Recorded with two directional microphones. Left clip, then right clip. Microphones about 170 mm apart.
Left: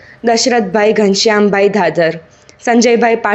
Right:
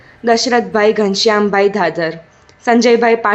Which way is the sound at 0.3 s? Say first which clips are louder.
Left 1 dB; 15° left (ahead or behind).